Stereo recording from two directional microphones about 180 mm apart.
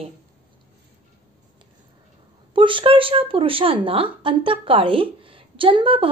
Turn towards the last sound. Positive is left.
turn(degrees=-30)  # may be behind; listen again after turning